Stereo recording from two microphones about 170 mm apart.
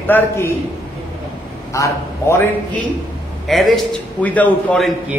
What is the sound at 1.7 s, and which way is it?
Speech, 15° left (ahead or behind).